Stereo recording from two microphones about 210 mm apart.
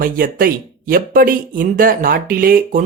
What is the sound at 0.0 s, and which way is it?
Speech, 40° right (ahead or behind).